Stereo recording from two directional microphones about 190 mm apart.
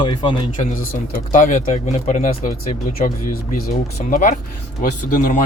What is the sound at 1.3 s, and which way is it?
Speech, 40° left (ahead or behind).